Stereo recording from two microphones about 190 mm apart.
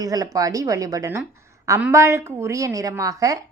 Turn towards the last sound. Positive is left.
turn(degrees=-15)  # may be behind; listen again after turning